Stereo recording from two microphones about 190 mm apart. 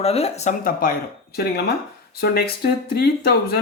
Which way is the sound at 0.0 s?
30° left (ahead or behind).